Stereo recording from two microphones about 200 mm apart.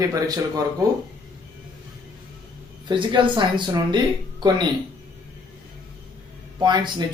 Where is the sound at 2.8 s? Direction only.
25° right (ahead or behind).